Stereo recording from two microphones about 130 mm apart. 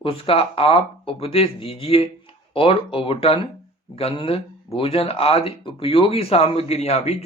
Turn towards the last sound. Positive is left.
turn(degrees=55)  # may be behind; listen again after turning